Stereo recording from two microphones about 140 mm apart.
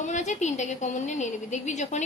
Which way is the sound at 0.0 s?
55° left (ahead or behind).